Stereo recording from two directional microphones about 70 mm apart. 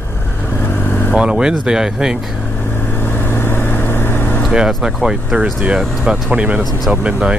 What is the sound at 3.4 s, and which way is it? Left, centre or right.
Vehicle, left.